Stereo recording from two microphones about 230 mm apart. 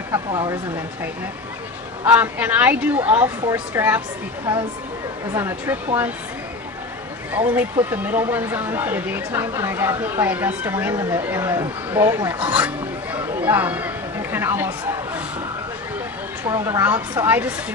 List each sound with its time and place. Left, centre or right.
0.1 s speech: centre
2.0 s speech: centre
5.3 s speech: centre
7.3 s speech: centre
13.4 s a sound: centre
16.5 s speech: centre